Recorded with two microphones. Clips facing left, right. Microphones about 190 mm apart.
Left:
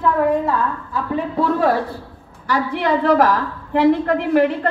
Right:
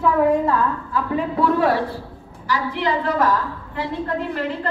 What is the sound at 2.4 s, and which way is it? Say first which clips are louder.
A woman's voice: left 3 dB; 60° left (ahead or behind).